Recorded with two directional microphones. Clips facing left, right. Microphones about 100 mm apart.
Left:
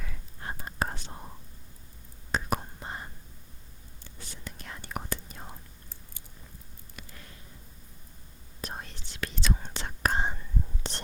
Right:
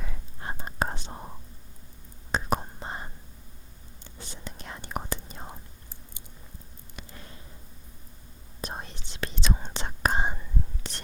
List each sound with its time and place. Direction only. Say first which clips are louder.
0.0 s whispering: right 2 dB; 25° right (ahead or behind)
2.3 s whispering: right 3 dB; 25° right (ahead or behind)
6.9 s a sound: right 3 dB; 25° right (ahead or behind)
8.6 s whispering: right 2 dB; 20° right (ahead or behind)
10.8 s whispering: left 3 dB; 30° left (ahead or behind)